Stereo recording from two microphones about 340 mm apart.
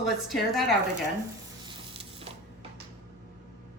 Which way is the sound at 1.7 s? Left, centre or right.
Centre.